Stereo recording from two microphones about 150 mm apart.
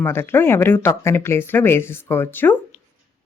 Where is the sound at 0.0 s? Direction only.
15° left (ahead or behind).